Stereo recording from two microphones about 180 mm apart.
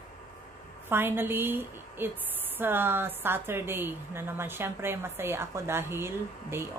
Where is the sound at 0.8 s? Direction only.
10° right (ahead or behind).